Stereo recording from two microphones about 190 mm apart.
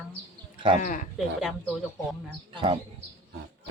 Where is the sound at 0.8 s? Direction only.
45° left (ahead or behind).